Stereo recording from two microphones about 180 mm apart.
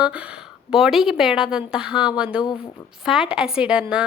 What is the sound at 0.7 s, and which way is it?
A woman's voice, centre (ahead or behind).